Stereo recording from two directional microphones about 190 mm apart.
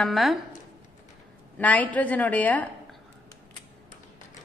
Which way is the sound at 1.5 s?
10° left (ahead or behind).